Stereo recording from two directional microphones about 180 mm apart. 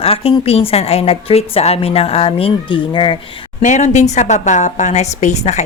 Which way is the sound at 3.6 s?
40° left (ahead or behind).